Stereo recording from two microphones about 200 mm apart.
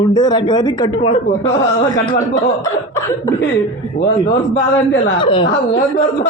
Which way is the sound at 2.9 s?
15° left (ahead or behind).